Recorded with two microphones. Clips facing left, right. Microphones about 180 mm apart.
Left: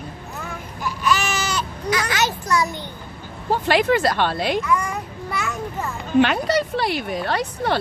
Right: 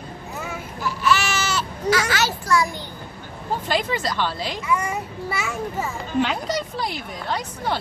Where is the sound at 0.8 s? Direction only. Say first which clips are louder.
Even; 15° left (ahead or behind).